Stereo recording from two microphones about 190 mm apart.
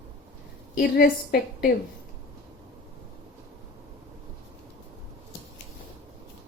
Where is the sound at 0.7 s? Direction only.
50° left (ahead or behind).